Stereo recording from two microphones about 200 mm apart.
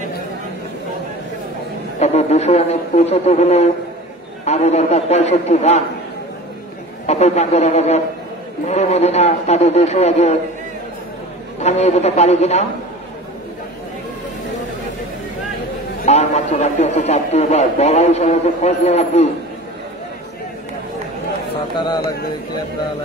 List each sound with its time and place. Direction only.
2.0 s a man's voice: 35° left (ahead or behind)
7.1 s a man's voice: 35° left (ahead or behind)
11.6 s a man's voice: 35° left (ahead or behind)
16.1 s a man's voice: 35° left (ahead or behind)
21.7 s a man's voice: 20° left (ahead or behind)